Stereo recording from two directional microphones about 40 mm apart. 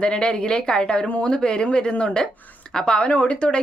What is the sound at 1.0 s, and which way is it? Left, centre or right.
Speech, left.